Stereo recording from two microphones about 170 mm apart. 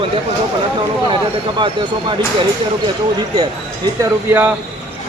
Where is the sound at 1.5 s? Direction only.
30° right (ahead or behind).